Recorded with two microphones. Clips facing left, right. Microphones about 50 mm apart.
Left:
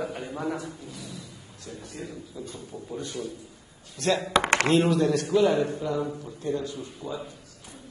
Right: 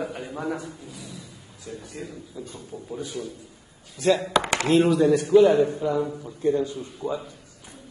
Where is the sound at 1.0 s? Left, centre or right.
Right.